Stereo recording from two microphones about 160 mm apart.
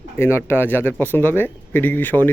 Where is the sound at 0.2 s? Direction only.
15° left (ahead or behind).